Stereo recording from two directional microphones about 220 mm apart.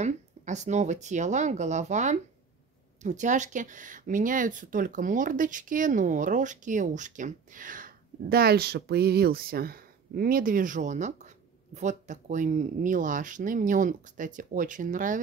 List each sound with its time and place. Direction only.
0.0 s speech: 30° right (ahead or behind)